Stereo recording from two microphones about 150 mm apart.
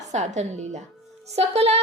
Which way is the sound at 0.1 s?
50° right (ahead or behind).